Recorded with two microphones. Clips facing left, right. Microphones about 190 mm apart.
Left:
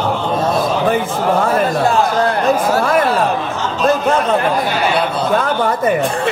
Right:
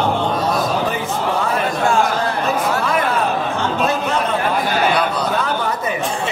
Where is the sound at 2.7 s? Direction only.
45° left (ahead or behind).